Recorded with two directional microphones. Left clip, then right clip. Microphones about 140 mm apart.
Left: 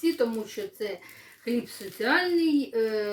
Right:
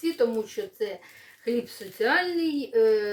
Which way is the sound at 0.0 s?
20° right (ahead or behind).